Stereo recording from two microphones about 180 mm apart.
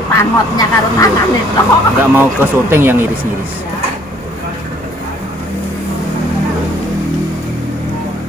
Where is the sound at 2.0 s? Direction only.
10° right (ahead or behind).